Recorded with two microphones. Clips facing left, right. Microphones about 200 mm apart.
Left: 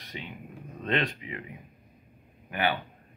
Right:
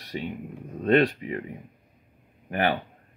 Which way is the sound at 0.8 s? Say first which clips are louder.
Right 9 dB; 45° right (ahead or behind).